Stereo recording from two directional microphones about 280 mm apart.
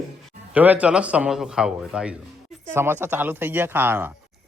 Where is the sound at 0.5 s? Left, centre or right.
Centre.